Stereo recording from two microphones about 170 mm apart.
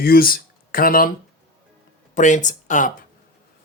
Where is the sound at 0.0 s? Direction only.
60° left (ahead or behind).